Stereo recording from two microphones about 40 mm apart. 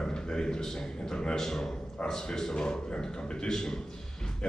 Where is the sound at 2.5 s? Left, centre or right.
Left.